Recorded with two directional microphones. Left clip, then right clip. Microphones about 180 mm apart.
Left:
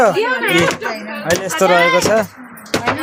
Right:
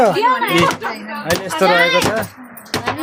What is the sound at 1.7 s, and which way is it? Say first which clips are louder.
Speech: left 1 dB; 30° left (ahead or behind).